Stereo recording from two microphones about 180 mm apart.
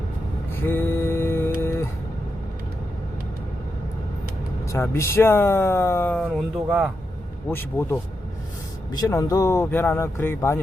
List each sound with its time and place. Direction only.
0.5 s a sound: 10° left (ahead or behind)
4.7 s speech: 15° left (ahead or behind)
6.7 s speech: 5° right (ahead or behind)
7.5 s speech: 10° left (ahead or behind)